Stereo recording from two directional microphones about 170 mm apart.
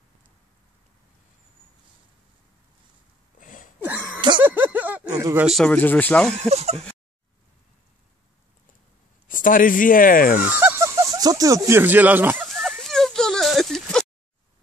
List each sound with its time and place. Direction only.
3.3 s throat clearing: 50° left (ahead or behind)
4.4 s a sound: 10° right (ahead or behind)
5.1 s speech: 20° right (ahead or behind)
5.6 s speech: 10° left (ahead or behind)
6.5 s speech: 40° right (ahead or behind)
9.3 s speech: 50° left (ahead or behind)
10.5 s speech: 10° right (ahead or behind)
12.4 s a sound: centre (ahead or behind)